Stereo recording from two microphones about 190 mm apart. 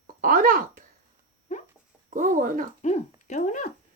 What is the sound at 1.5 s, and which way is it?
Dog, 40° left (ahead or behind).